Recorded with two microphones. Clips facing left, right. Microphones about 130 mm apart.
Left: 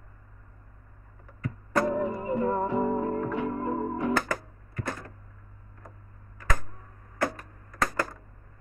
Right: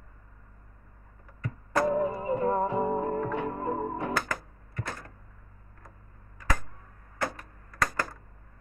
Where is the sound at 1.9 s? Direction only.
20° right (ahead or behind).